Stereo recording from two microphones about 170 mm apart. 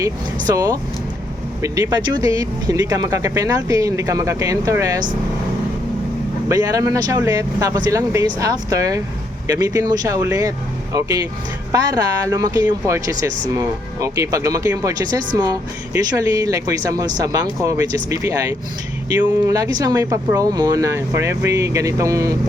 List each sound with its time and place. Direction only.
0.4 s speech: 20° right (ahead or behind)
6.5 s speech: 20° right (ahead or behind)